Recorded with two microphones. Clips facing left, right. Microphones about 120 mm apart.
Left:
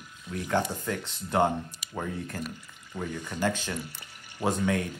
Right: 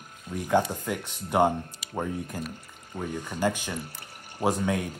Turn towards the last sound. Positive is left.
turn(degrees=-15)  # may be behind; listen again after turning